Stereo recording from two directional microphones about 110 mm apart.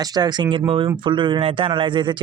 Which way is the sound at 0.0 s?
40° right (ahead or behind).